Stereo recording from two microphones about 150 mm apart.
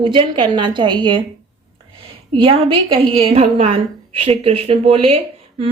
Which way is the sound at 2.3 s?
35° right (ahead or behind).